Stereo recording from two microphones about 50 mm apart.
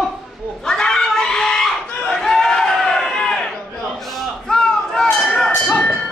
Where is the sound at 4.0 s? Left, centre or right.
Centre.